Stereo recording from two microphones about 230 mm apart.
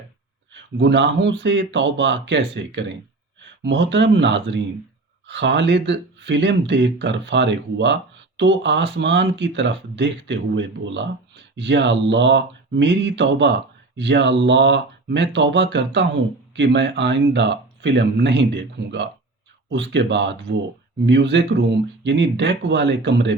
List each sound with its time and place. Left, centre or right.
0.8 s speech: right